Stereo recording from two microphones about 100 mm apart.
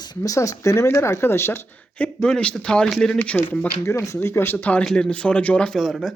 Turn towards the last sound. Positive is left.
turn(degrees=0)  # may be behind; listen again after turning